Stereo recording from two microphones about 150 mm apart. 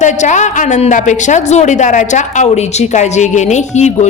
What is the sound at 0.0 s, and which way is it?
A woman's voice, 50° left (ahead or behind).